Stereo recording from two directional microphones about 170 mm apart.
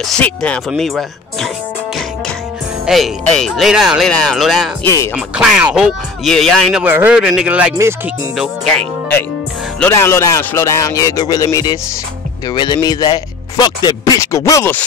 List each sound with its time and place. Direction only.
0.0 s speech: 5° left (ahead or behind)
2.8 s speech: centre (ahead or behind)
4.8 s speech: 15° left (ahead or behind)
5.1 s speech: 5° right (ahead or behind)
6.8 s a man's voice: 10° right (ahead or behind)
8.4 s speech: centre (ahead or behind)
9.8 s speech: 15° left (ahead or behind)